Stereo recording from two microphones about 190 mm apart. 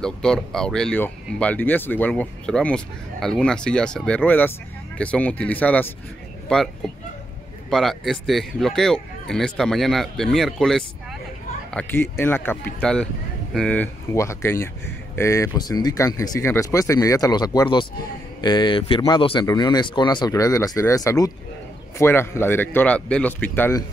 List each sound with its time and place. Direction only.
0.0 s speech: 5° left (ahead or behind)
7.7 s speech: centre (ahead or behind)